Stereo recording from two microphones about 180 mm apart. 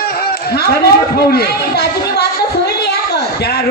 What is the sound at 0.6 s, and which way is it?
Speech, 60° left (ahead or behind).